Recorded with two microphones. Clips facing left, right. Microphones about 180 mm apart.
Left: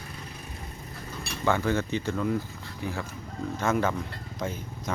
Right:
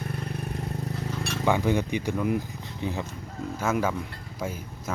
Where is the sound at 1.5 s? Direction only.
15° right (ahead or behind).